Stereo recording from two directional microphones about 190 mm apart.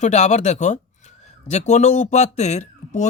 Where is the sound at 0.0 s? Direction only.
35° left (ahead or behind).